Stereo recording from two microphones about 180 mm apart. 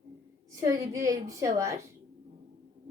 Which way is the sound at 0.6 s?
20° right (ahead or behind).